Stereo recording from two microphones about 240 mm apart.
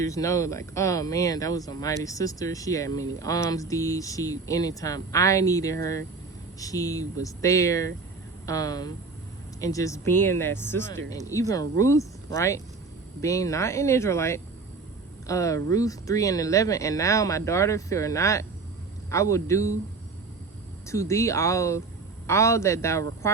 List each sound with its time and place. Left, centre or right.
0.0 s speech: centre
20.8 s speech: centre